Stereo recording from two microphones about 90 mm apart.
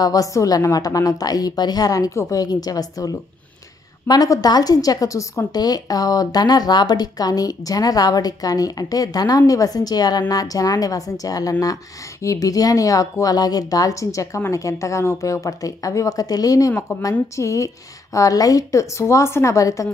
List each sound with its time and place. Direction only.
0.0 s speech: 40° left (ahead or behind)
5.5 s speech: 45° left (ahead or behind)